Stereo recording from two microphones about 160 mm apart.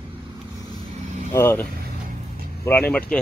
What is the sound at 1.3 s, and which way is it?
Speech, 15° left (ahead or behind).